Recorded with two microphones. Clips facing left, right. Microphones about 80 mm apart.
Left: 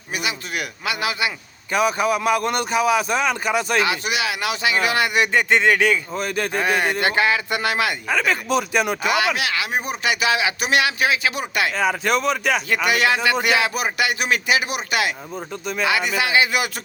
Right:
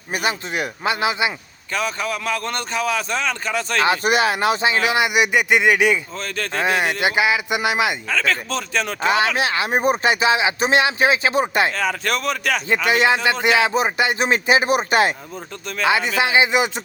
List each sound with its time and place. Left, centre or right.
0.1 s a man's voice: right
0.5 s speech: right
1.7 s speech: centre
3.8 s speech: right; by 6.0 s centre
6.1 s speech: centre
6.6 s speech: centre
8.1 s speech: centre
9.0 s speech: right
11.8 s speech: centre
12.9 s speech: right
15.9 s speech: right